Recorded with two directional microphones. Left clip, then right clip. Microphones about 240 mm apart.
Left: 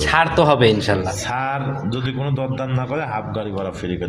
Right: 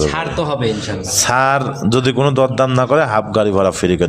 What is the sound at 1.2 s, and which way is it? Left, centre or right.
A man's voice, right.